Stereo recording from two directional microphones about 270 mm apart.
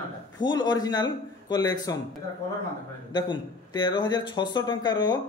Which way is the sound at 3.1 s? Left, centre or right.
Centre.